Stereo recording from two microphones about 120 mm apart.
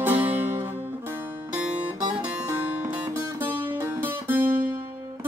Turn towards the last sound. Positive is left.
turn(degrees=-15)  # may be behind; listen again after turning